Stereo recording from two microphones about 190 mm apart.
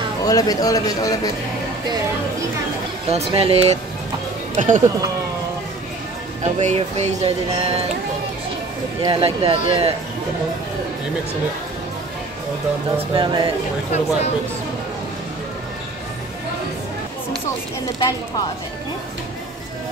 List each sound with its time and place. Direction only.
0.2 s speech: 20° left (ahead or behind)
3.1 s speech: 30° right (ahead or behind)
4.6 s speech: 40° right (ahead or behind)
6.4 s speech: 35° right (ahead or behind)
9.0 s speech: 30° right (ahead or behind)
13.1 s speech: 25° right (ahead or behind)